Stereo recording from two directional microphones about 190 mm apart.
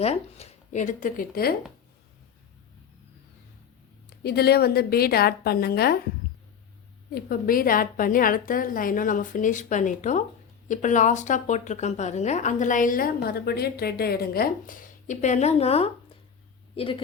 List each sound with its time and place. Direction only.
0.0 s speech: 35° left (ahead or behind); by 1.5 s 50° left (ahead or behind)
4.2 s a woman's voice: 55° left (ahead or behind)
7.1 s a woman's voice: 50° left (ahead or behind); by 17.0 s 30° left (ahead or behind)